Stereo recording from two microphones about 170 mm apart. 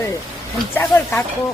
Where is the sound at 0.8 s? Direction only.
15° left (ahead or behind).